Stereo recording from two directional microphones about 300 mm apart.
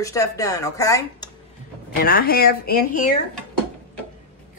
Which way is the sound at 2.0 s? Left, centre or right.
Left.